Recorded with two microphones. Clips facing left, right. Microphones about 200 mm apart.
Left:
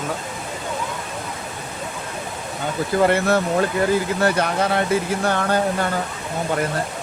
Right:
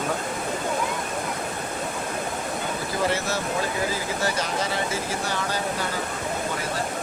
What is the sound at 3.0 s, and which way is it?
Speech, 60° left (ahead or behind).